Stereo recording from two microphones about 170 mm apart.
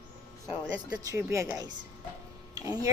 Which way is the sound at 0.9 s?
20° right (ahead or behind).